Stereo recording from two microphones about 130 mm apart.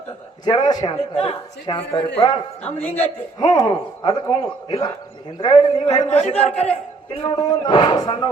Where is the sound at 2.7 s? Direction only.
15° left (ahead or behind).